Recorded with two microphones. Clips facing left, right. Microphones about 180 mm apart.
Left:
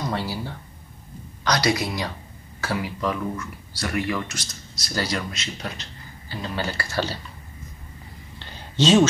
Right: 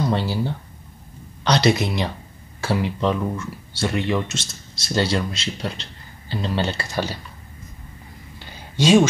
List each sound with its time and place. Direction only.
0.1 s speech: 25° right (ahead or behind)
1.4 s speech: 25° right (ahead or behind)
8.4 s a sound: 10° right (ahead or behind)